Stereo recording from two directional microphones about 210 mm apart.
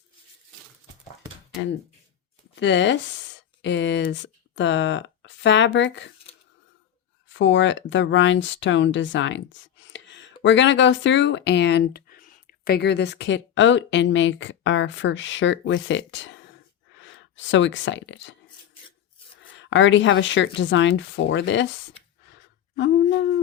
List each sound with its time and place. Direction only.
2.6 s speech: 60° left (ahead or behind)
7.3 s speech: 60° left (ahead or behind)
19.4 s speech: 60° left (ahead or behind)
22.8 s speech: 55° left (ahead or behind)